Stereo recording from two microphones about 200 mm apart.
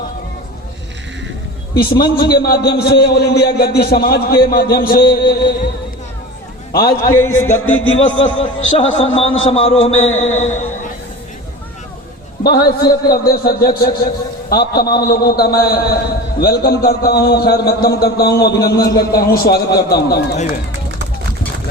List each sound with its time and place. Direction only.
1.7 s a man's voice: 50° left (ahead or behind)
6.7 s a man's voice: 50° left (ahead or behind)
7.2 s music: 10° left (ahead or behind)
7.6 s speech: 80° left
8.4 s a man's voice: 30° left (ahead or behind)
12.4 s a man's voice: 50° left (ahead or behind)